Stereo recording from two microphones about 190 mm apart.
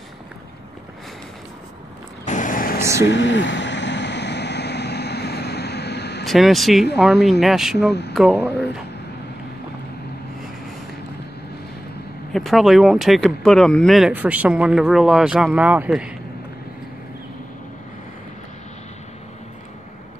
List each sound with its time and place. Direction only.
2.2 s vehicle: 40° left (ahead or behind)
2.8 s speech: 15° right (ahead or behind)
3.1 s vehicle: 70° left (ahead or behind)
6.2 s speech: centre (ahead or behind)
12.3 s speech: centre (ahead or behind)